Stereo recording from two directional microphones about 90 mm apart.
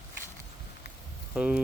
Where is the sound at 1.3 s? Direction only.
10° right (ahead or behind).